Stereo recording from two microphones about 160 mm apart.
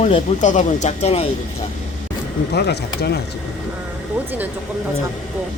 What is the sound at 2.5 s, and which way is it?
Speech, 90° left.